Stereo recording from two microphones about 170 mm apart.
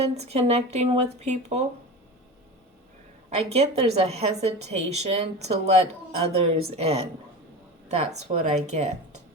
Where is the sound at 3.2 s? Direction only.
40° right (ahead or behind).